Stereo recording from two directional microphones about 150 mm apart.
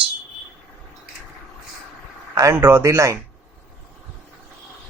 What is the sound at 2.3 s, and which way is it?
Speech, 20° right (ahead or behind).